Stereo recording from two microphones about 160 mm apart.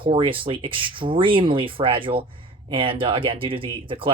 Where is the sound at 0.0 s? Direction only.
35° right (ahead or behind).